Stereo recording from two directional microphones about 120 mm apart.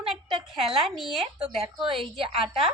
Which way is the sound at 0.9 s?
Centre (ahead or behind).